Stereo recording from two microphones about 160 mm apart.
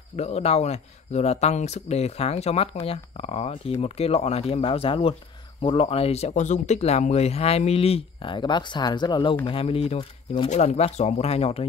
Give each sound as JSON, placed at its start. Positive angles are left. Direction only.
{"t": 0.1, "sound": "speech", "side_deg": 40}
{"t": 10.5, "sound": "speech", "side_deg": 45}